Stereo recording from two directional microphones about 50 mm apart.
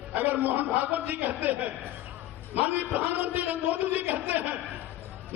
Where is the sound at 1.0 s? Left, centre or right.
Right.